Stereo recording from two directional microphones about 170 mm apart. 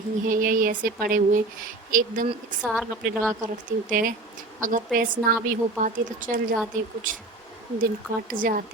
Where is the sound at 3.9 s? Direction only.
55° right (ahead or behind).